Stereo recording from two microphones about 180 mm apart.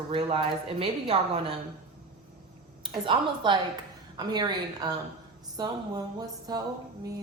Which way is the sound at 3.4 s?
25° right (ahead or behind).